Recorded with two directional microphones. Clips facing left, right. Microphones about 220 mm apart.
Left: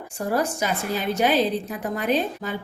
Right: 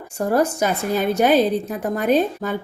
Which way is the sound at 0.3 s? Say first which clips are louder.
Right 5 dB; 50° right (ahead or behind).